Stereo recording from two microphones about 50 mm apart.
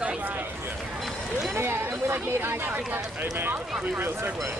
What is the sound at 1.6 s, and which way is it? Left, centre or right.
Chatter, right.